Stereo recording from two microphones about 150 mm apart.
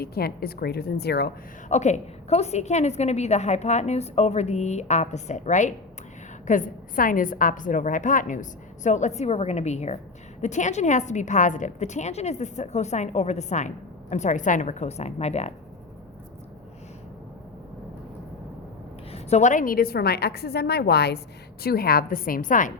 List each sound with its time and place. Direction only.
0.0 s a woman's voice: 90° left
1.7 s a woman's voice: 50° left (ahead or behind)
19.1 s a woman's voice: 50° left (ahead or behind)